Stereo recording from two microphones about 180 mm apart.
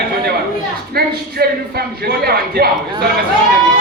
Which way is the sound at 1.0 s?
60° right (ahead or behind).